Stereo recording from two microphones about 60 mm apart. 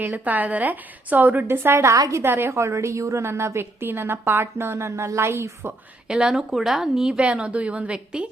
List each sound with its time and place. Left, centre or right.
0.0 s a woman's voice: right
1.6 s a woman's voice: right
2.0 s a woman's voice: right
2.2 s a woman's voice: right
2.5 s a woman's voice: right
6.1 s speech: centre
7.2 s a woman's voice: centre